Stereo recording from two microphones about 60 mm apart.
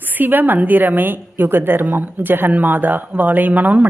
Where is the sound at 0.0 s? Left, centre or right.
Right.